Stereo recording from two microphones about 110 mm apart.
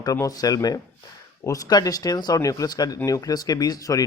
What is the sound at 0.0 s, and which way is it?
A man's voice, 30° left (ahead or behind).